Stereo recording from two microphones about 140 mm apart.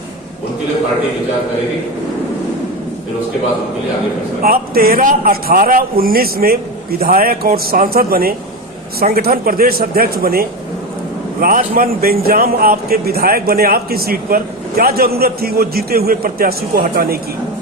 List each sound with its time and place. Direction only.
4.4 s a man's voice: 90° right